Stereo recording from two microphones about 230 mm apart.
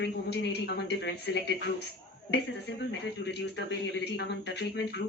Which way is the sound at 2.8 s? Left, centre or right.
Left.